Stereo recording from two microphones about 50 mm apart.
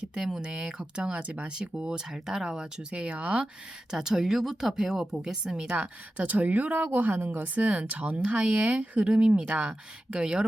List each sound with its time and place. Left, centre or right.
0.1 s speech: centre
3.9 s speech: centre
5.7 s speech: right